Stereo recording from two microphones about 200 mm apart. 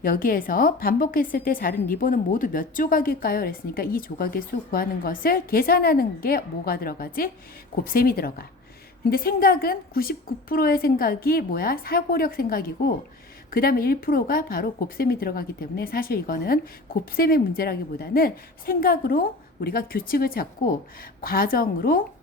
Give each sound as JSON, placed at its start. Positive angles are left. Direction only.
{"t": 0.0, "sound": "speech", "side_deg": 45}